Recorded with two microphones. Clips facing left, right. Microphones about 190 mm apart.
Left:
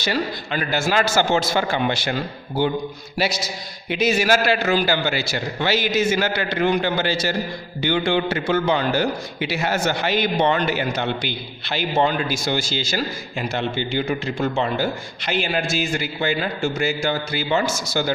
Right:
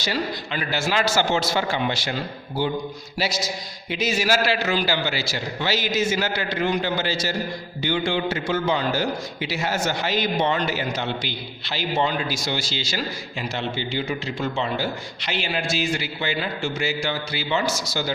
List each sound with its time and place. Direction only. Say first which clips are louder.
0.0 s a man's voice: left 2 dB; 55° left (ahead or behind)
3.8 s a man's voice: left 4 dB; 60° left (ahead or behind)